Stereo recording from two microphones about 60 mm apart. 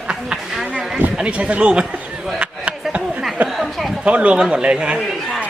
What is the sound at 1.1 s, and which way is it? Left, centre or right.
Speech, centre.